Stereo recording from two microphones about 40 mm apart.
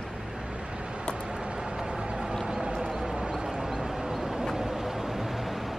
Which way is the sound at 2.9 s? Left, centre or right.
Centre.